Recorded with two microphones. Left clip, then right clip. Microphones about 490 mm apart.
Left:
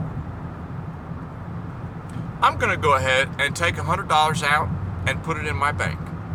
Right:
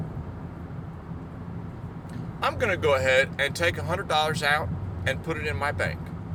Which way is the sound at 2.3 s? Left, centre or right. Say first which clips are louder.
Left 6 dB; right.